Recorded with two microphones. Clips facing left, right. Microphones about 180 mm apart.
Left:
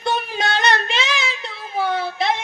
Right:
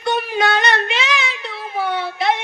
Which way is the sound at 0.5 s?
30° left (ahead or behind).